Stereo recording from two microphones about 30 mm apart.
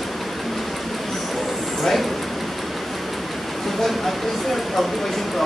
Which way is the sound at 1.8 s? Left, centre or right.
Centre.